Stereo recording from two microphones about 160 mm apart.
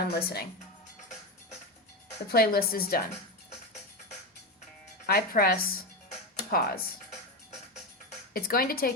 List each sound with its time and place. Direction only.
0.1 s speech: 80° left
2.3 s a woman's voice: 70° left (ahead or behind)
5.0 s a woman's voice: 70° left (ahead or behind)
8.3 s a woman's voice: 65° left (ahead or behind)